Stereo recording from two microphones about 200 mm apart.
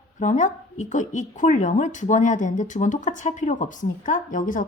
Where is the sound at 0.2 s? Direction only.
40° left (ahead or behind).